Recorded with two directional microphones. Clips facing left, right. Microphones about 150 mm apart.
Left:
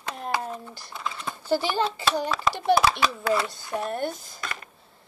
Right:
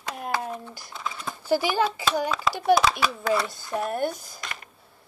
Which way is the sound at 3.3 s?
5° left (ahead or behind).